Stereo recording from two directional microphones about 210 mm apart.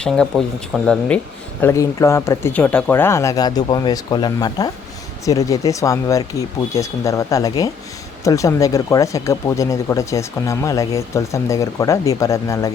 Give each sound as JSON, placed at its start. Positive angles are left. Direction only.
{"t": 0.0, "sound": "speech", "side_deg": 5}